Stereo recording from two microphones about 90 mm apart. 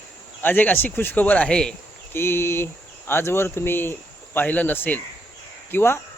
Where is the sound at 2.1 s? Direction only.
25° left (ahead or behind).